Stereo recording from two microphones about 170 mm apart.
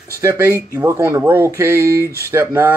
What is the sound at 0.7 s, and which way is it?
Speech, 15° right (ahead or behind).